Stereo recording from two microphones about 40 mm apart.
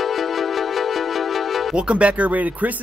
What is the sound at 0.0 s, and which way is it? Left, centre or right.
Music, centre.